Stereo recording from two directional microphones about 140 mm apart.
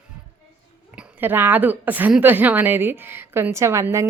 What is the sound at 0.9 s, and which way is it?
A woman's voice, 15° right (ahead or behind).